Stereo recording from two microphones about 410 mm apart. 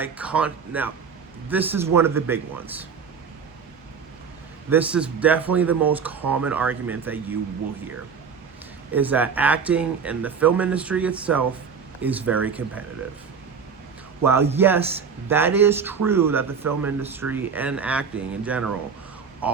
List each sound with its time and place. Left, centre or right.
0.0 s speech: centre
4.7 s speech: centre
8.9 s speech: centre
14.3 s speech: centre